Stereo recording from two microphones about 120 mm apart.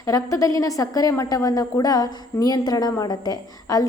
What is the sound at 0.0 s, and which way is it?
A woman's voice, 30° left (ahead or behind).